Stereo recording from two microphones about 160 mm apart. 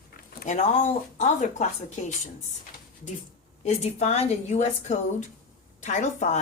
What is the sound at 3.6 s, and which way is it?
A woman's voice, 45° left (ahead or behind).